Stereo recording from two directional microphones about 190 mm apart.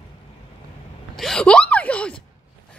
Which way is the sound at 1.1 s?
Centre (ahead or behind).